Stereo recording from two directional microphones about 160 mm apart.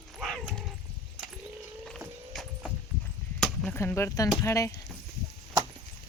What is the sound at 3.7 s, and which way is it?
Speech, 15° left (ahead or behind).